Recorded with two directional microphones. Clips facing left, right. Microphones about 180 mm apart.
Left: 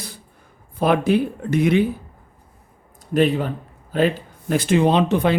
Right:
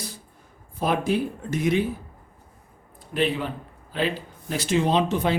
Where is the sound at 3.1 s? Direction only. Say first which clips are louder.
Left 6 dB; 45° left (ahead or behind); by 5.3 s 60° left (ahead or behind).